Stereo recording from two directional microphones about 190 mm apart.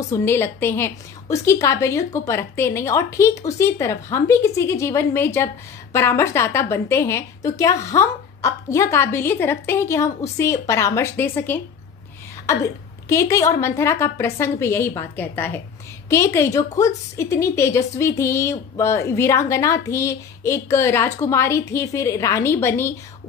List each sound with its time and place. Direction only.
0.1 s a woman's voice: 10° left (ahead or behind)